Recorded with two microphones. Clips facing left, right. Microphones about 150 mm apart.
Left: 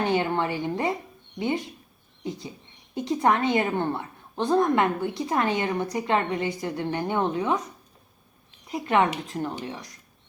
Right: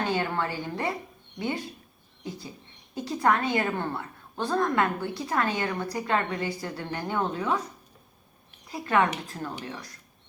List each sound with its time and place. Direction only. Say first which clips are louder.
0.0 s a woman's voice: left 4 dB; 20° left (ahead or behind)
2.9 s a woman's voice: left 2 dB; 20° left (ahead or behind)
8.7 s a woman's voice: left 2 dB; 20° left (ahead or behind)